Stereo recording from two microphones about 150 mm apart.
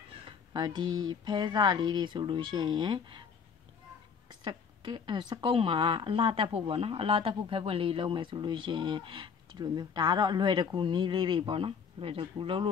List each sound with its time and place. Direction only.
0.5 s speech: 30° right (ahead or behind)
4.3 s speech: 30° right (ahead or behind)